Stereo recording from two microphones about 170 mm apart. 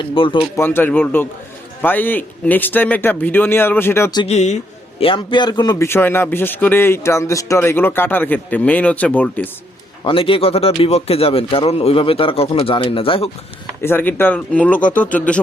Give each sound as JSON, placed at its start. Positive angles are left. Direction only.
{"t": 0.0, "sound": "speech", "side_deg": 30}
{"t": 0.5, "sound": "speech", "side_deg": 15}
{"t": 4.2, "sound": "speech", "side_deg": 40}
{"t": 4.9, "sound": "a man's voice", "side_deg": 30}
{"t": 5.9, "sound": "speech", "side_deg": 15}
{"t": 10.0, "sound": "speech", "side_deg": 30}
{"t": 13.8, "sound": "speech", "side_deg": 10}